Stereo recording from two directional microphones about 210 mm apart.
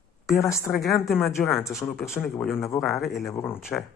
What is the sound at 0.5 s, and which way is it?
Speech, centre (ahead or behind).